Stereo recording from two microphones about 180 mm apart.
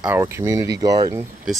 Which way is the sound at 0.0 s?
15° right (ahead or behind).